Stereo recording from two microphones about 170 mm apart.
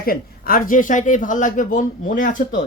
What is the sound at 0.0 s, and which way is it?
Speech, 60° left (ahead or behind).